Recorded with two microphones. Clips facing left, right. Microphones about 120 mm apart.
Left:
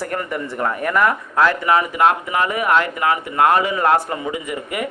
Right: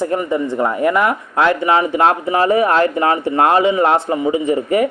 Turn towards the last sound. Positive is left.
turn(degrees=-35)  # may be behind; listen again after turning